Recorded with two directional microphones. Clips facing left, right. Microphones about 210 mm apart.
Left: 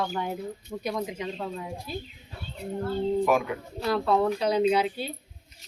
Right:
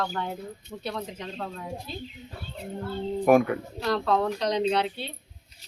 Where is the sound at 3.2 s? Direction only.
55° right (ahead or behind).